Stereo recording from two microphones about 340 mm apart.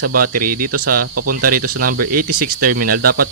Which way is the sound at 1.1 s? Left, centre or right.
Right.